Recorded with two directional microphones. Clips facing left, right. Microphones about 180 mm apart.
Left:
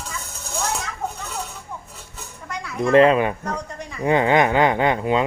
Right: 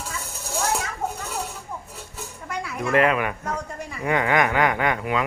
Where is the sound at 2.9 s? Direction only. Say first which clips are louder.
Left 6 dB; 30° left (ahead or behind).